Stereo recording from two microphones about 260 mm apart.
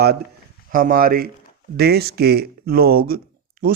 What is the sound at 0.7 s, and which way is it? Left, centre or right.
Speech, right.